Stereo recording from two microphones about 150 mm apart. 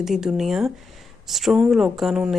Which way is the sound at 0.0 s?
5° right (ahead or behind).